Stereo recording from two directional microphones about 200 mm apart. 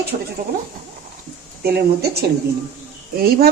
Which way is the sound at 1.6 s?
50° right (ahead or behind).